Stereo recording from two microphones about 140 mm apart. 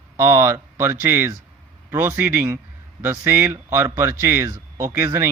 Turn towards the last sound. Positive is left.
turn(degrees=-20)  # may be behind; listen again after turning